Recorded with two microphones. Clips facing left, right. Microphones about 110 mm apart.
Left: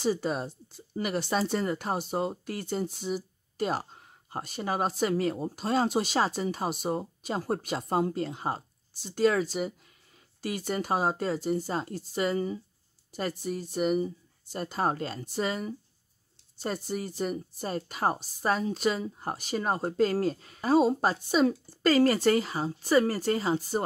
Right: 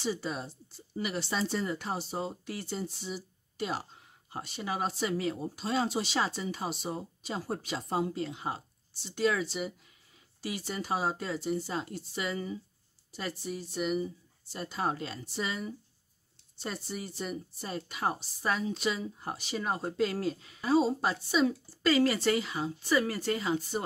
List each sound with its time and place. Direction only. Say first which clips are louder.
0.0 s speech: left 6 dB; 45° left (ahead or behind)